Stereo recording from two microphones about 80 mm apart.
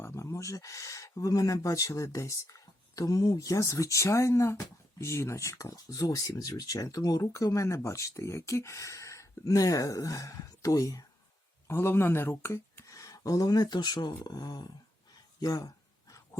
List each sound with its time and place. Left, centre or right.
0.0 s speech: left
11.7 s speech: left
12.9 s speech: left